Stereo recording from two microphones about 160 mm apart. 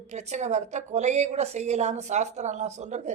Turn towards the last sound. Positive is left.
turn(degrees=-45)  # may be behind; listen again after turning